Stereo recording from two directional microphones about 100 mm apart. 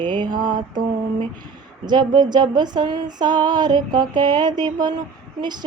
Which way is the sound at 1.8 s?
45° right (ahead or behind).